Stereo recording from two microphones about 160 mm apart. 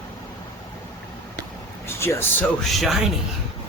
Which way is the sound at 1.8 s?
15° left (ahead or behind).